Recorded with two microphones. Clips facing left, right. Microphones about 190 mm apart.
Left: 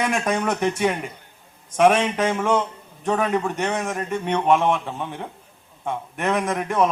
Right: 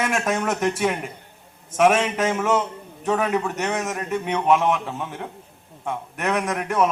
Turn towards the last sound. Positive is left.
turn(degrees=0)  # may be behind; listen again after turning